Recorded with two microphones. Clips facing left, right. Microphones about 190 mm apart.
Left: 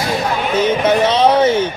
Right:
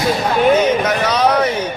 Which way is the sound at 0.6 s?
30° left (ahead or behind).